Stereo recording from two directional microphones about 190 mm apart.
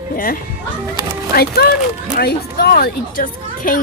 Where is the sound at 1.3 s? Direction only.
55° left (ahead or behind).